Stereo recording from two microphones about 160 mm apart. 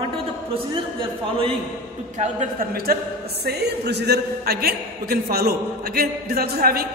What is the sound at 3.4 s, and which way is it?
A man's voice, 90° right.